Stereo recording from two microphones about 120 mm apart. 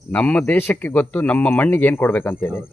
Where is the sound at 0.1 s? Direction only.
10° left (ahead or behind).